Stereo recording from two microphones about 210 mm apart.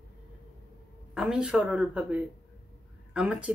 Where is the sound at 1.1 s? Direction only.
5° right (ahead or behind).